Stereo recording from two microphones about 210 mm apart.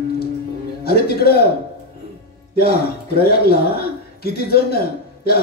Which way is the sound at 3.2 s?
45° left (ahead or behind).